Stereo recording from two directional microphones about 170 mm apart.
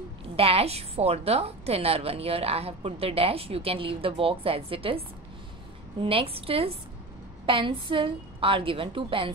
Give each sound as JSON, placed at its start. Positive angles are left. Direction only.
{"t": 0.4, "sound": "a woman's voice", "side_deg": -35}